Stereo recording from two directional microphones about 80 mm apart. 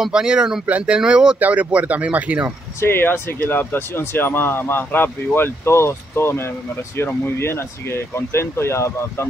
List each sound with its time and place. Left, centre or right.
0.0 s speech: centre
2.8 s speech: left